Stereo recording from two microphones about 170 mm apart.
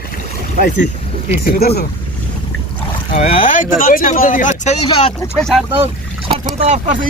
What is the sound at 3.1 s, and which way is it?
Speech, 45° left (ahead or behind).